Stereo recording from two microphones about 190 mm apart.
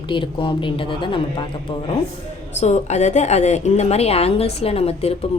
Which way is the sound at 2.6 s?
35° left (ahead or behind).